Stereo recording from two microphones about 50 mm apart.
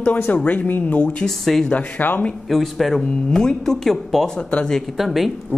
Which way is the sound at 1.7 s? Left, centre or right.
Left.